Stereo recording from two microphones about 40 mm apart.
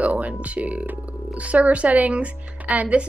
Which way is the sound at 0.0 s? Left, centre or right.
Right.